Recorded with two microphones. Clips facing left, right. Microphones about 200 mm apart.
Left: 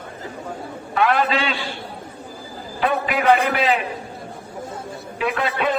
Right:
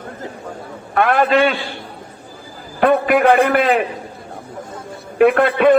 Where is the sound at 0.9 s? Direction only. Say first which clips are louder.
Right 5 dB; 55° right (ahead or behind).